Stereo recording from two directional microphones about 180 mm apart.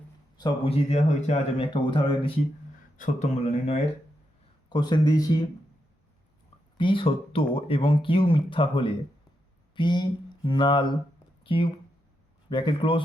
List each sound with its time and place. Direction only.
0.3 s speech: 25° left (ahead or behind)
3.0 s speech: 40° left (ahead or behind)
4.7 s speech: 25° left (ahead or behind)
6.7 s speech: 30° left (ahead or behind)
9.7 s a sound: 25° left (ahead or behind)
11.4 s speech: 30° left (ahead or behind)